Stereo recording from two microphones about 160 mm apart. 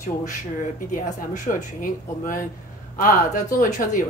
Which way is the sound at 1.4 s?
55° left (ahead or behind).